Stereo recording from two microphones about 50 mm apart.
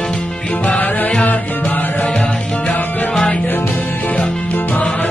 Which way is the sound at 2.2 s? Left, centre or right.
Centre.